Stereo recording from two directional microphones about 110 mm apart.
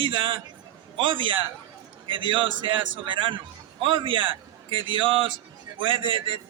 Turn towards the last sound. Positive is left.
turn(degrees=-55)  # may be behind; listen again after turning